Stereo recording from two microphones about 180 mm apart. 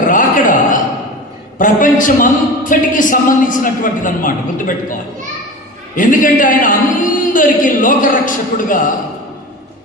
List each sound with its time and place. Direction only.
0.1 s a sound: 45° left (ahead or behind)
1.5 s a man's voice: 50° left (ahead or behind)
6.0 s a man's voice: 45° left (ahead or behind)